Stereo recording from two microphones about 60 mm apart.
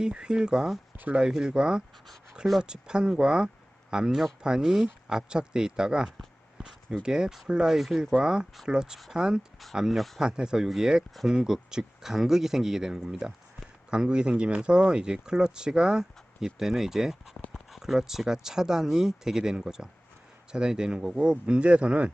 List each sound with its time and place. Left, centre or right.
0.0 s speech: centre
0.9 s speech: right
1.2 s speech: centre
10.2 s speech: centre